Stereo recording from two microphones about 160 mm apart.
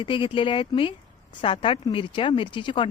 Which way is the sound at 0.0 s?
35° left (ahead or behind).